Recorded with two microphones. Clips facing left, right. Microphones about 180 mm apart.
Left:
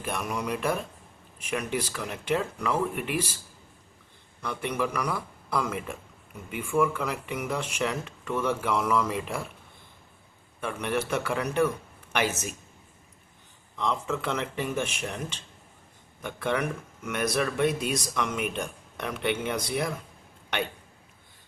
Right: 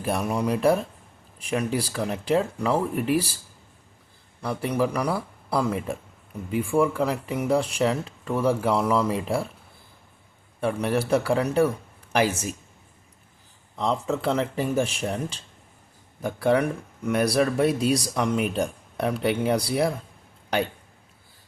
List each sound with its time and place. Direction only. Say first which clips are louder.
0.0 s speech: right 6 dB; 35° right (ahead or behind)
4.4 s speech: right 5 dB; 35° right (ahead or behind)
10.6 s speech: right 5 dB; 35° right (ahead or behind)
13.7 s speech: right 4 dB; 35° right (ahead or behind)